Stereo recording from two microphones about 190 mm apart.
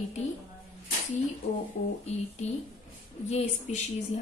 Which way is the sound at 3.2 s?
35° left (ahead or behind).